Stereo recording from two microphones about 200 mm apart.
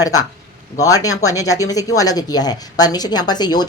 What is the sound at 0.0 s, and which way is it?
Speech, 20° left (ahead or behind).